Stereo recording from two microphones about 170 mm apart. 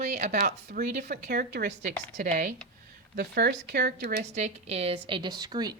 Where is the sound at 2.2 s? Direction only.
50° right (ahead or behind).